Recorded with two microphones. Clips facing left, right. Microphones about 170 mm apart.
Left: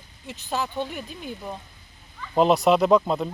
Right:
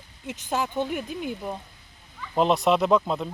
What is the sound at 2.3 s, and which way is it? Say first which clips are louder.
Speech: left 3 dB; centre (ahead or behind).